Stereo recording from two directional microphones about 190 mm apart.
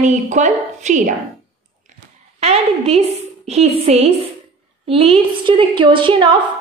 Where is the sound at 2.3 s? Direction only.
35° right (ahead or behind).